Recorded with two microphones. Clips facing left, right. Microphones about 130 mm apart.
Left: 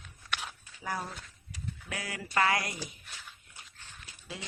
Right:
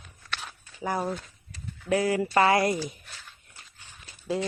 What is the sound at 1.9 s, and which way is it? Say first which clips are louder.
Speech: right 18 dB; 30° right (ahead or behind).